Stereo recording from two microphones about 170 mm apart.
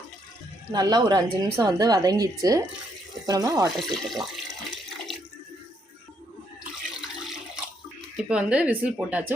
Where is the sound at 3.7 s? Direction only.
Centre (ahead or behind).